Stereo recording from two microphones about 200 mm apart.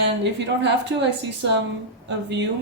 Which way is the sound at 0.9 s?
55° right (ahead or behind).